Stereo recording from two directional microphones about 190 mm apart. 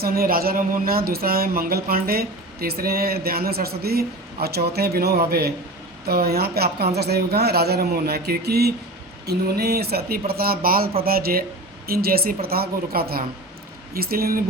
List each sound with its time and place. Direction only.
0.0 s speech: 50° right (ahead or behind)